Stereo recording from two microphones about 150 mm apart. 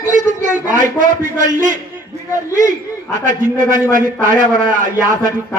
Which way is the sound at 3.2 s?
55° right (ahead or behind).